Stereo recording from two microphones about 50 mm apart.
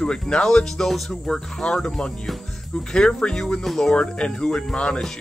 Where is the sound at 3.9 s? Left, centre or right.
Centre.